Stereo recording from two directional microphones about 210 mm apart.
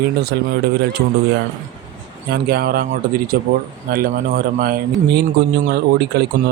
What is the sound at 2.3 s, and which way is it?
Speech, 45° right (ahead or behind).